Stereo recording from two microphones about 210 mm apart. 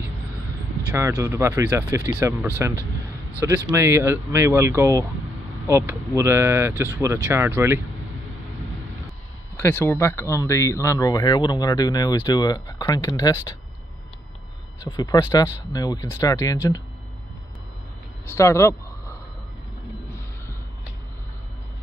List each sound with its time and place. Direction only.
0.9 s speech: 15° right (ahead or behind)
9.6 s speech: 10° left (ahead or behind)
15.0 s speech: 15° left (ahead or behind)
18.3 s speech: 15° left (ahead or behind)